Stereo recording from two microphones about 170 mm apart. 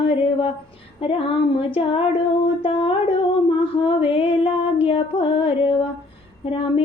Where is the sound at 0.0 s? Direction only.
30° left (ahead or behind).